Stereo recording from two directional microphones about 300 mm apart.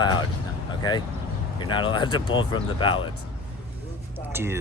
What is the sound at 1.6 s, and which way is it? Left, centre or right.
Speech, centre.